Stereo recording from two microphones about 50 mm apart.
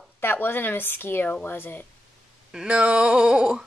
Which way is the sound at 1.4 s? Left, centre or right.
Left.